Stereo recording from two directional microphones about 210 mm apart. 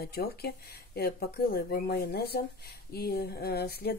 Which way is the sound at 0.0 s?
45° left (ahead or behind).